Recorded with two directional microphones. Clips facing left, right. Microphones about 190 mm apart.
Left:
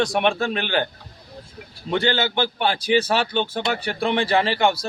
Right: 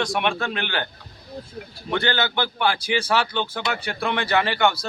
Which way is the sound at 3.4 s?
30° left (ahead or behind).